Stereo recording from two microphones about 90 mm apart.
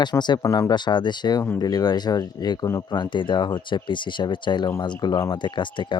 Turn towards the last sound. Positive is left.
turn(degrees=60)  # may be behind; listen again after turning